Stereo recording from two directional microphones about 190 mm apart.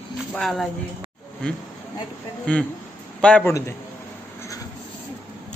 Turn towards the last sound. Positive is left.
turn(degrees=15)  # may be behind; listen again after turning